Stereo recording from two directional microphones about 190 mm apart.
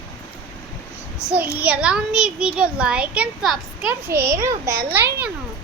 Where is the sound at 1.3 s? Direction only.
5° right (ahead or behind).